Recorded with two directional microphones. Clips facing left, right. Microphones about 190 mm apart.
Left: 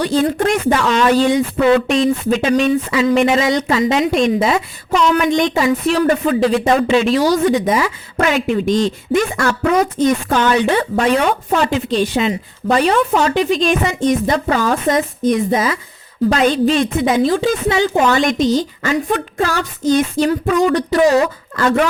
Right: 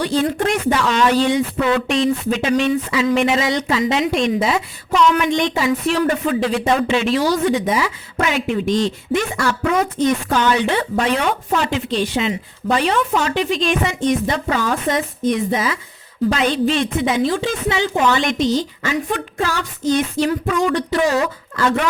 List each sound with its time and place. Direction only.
0.0 s speech: 45° left (ahead or behind)